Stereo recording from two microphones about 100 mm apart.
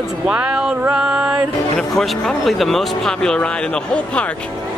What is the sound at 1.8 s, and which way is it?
Speech, 5° left (ahead or behind).